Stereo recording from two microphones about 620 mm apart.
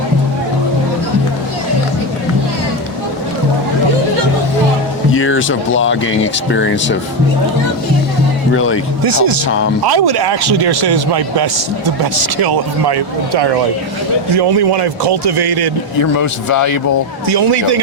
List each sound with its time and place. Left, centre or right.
5.1 s speech: centre
8.5 s speech: centre
9.0 s a man's voice: right
16.0 s speech: left